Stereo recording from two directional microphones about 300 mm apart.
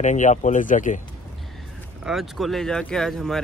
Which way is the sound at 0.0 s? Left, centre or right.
Left.